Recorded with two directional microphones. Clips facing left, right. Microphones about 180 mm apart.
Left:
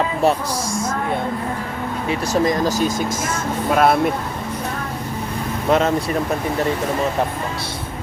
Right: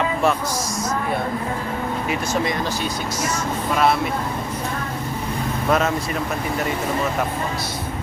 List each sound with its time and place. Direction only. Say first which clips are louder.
2.0 s speech: left 6 dB; 40° left (ahead or behind)
5.6 s speech: left 3 dB; 25° left (ahead or behind)